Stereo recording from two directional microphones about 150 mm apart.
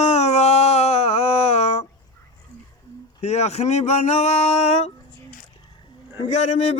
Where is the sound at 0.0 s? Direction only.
45° left (ahead or behind).